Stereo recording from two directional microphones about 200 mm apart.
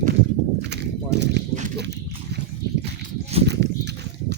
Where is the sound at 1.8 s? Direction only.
55° right (ahead or behind).